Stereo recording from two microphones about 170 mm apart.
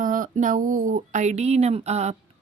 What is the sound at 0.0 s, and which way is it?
A woman's voice, 50° right (ahead or behind).